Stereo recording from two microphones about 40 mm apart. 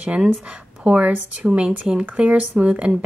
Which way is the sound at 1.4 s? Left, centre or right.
Centre.